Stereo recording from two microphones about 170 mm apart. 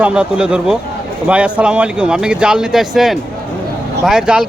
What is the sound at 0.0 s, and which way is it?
Speech, 5° right (ahead or behind).